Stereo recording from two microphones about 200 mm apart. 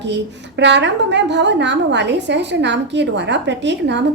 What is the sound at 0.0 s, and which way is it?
A woman's voice, 60° right (ahead or behind).